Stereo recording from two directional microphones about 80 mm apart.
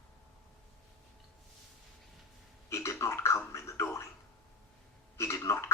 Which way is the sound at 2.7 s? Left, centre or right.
Left.